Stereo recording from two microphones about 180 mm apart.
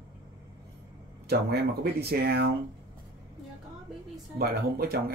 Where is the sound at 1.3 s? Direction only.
65° right (ahead or behind).